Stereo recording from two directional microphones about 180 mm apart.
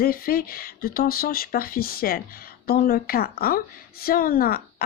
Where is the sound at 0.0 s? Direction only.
55° left (ahead or behind).